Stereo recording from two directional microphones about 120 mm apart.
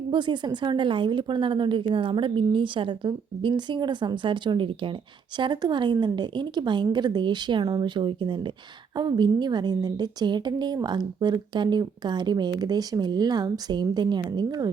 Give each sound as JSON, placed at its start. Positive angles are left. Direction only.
{"t": 0.1, "sound": "a woman's voice", "side_deg": -40}